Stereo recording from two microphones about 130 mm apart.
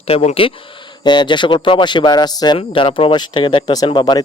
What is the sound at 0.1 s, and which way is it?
Speech, 50° left (ahead or behind).